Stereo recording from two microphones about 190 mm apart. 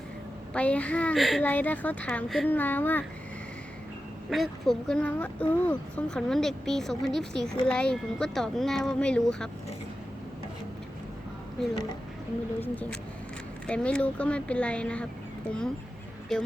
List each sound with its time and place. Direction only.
0.5 s speech: 5° left (ahead or behind)
4.3 s speech: centre (ahead or behind)
11.7 s speech: 20° left (ahead or behind)
12.5 s speech: 10° left (ahead or behind)
16.3 s speech: centre (ahead or behind)